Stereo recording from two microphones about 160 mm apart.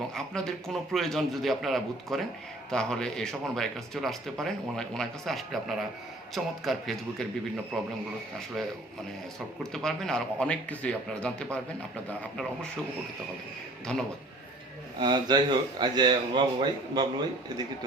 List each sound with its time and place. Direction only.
0.1 s speech: 5° left (ahead or behind)
9.7 s a man's voice: 5° left (ahead or behind)
14.9 s speech: 30° right (ahead or behind)